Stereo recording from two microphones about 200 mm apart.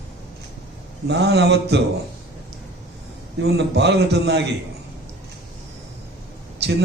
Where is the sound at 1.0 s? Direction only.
55° right (ahead or behind).